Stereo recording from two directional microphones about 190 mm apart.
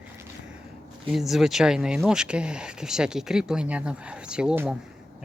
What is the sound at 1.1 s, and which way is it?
Speech, centre (ahead or behind).